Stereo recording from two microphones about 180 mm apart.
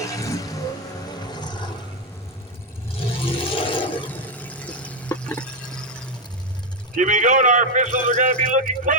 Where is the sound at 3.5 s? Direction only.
30° left (ahead or behind).